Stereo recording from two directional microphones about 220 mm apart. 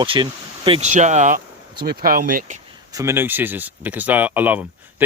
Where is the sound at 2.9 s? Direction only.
10° right (ahead or behind).